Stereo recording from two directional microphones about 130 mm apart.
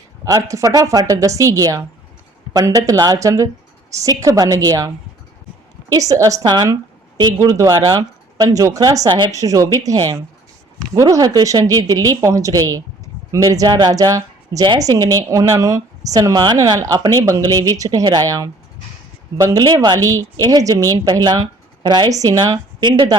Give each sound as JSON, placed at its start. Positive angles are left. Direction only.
{"t": 0.3, "sound": "speech", "side_deg": -25}
{"t": 5.9, "sound": "a woman's voice", "side_deg": -25}